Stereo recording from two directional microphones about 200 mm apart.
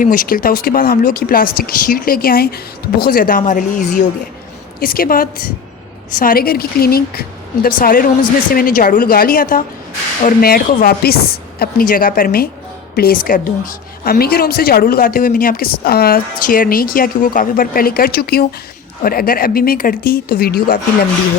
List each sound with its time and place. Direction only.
0.0 s speech: 45° left (ahead or behind)